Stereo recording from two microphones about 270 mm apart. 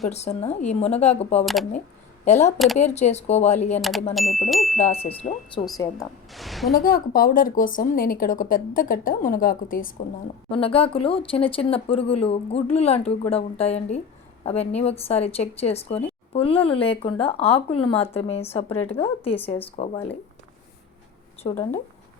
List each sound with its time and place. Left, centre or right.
0.1 s a woman's voice: left
3.8 s speech: centre
4.8 s a woman's voice: left
6.0 s a woman's voice: centre
6.7 s a woman's voice: left
10.5 s a woman's voice: left
21.5 s speech: centre